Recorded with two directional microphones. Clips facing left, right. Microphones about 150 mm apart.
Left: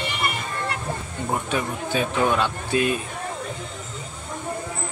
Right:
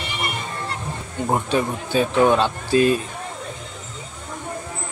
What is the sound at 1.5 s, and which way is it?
Speech, 30° right (ahead or behind).